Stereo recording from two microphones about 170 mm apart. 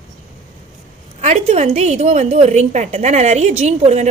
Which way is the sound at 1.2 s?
40° right (ahead or behind).